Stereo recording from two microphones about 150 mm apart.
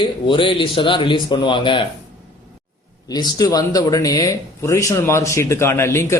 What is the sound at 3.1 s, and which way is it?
A man's voice, 25° left (ahead or behind).